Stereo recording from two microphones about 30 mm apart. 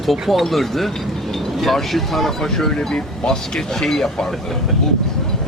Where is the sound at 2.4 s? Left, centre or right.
Centre.